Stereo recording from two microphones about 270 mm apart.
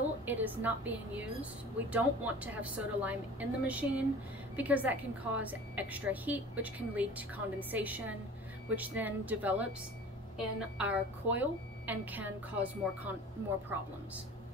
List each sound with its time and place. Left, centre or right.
0.2 s a woman's voice: centre